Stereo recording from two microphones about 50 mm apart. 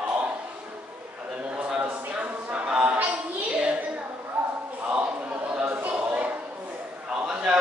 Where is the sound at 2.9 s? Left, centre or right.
Right.